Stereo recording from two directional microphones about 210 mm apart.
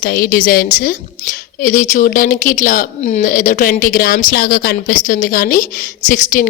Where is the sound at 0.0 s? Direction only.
45° left (ahead or behind).